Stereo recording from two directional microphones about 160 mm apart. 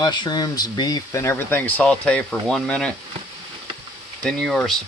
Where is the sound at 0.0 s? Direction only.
25° left (ahead or behind); by 2.9 s 5° left (ahead or behind).